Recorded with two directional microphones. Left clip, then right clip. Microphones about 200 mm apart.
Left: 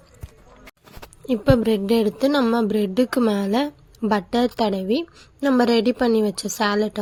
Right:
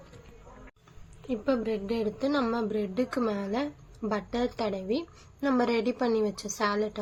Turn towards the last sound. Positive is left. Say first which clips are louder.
# left 7 dB
turn(degrees=40)  # may be behind; listen again after turning